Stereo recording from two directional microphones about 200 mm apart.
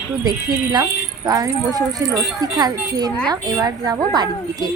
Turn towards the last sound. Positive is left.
turn(degrees=-20)  # may be behind; listen again after turning